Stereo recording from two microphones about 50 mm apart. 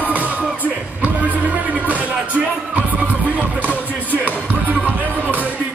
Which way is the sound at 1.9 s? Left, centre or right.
Right.